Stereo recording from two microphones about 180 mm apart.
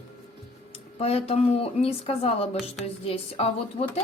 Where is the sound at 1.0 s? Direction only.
35° left (ahead or behind).